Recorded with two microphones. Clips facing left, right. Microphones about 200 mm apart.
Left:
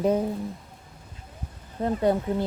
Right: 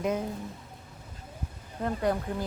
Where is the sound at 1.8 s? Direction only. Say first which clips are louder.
Left 5 dB; 25° left (ahead or behind).